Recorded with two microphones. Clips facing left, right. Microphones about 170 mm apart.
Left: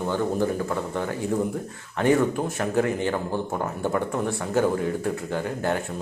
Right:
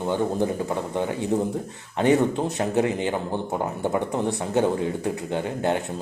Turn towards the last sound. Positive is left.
turn(degrees=-20)  # may be behind; listen again after turning